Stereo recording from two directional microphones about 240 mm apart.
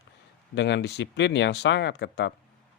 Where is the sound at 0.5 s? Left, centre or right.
Left.